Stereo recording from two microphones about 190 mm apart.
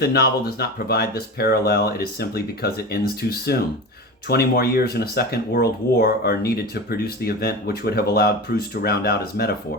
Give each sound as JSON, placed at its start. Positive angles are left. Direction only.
{"t": 0.0, "sound": "speech", "side_deg": 55}